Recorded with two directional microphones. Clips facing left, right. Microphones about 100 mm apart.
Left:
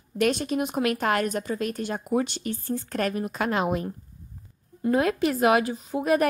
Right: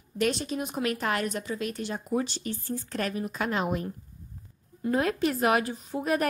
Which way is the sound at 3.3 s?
70° left (ahead or behind).